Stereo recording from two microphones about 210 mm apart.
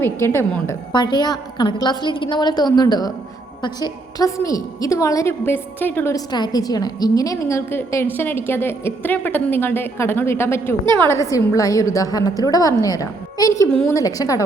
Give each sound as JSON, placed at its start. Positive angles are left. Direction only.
{"t": 0.0, "sound": "a woman's voice", "side_deg": 10}